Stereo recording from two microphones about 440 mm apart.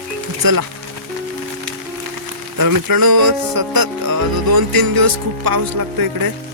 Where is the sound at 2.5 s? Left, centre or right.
Right.